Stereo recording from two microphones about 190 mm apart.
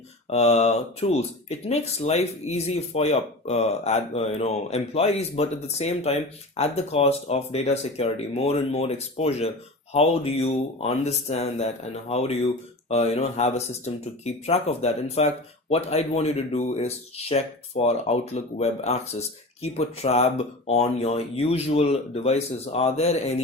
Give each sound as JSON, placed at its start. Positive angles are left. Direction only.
{"t": 0.3, "sound": "speech", "side_deg": 35}